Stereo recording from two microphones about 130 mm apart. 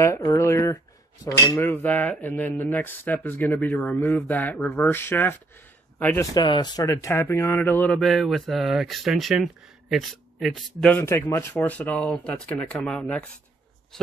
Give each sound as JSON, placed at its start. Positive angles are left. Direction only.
{"t": 0.0, "sound": "speech", "side_deg": 25}
{"t": 1.7, "sound": "speech", "side_deg": 15}
{"t": 6.3, "sound": "speech", "side_deg": 35}
{"t": 8.0, "sound": "speech", "side_deg": 0}
{"t": 11.0, "sound": "speech", "side_deg": 15}